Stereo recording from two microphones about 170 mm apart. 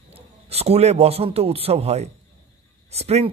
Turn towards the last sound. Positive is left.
turn(degrees=-40)  # may be behind; listen again after turning